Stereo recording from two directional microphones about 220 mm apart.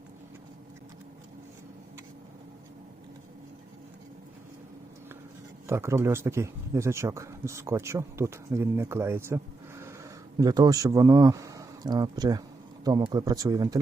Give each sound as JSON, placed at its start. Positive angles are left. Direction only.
{"t": 5.6, "sound": "speech", "side_deg": -10}